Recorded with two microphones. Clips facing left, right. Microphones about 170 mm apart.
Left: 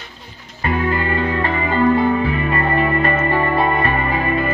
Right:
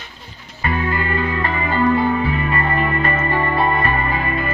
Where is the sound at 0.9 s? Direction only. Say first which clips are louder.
Left 2 dB; 30° left (ahead or behind).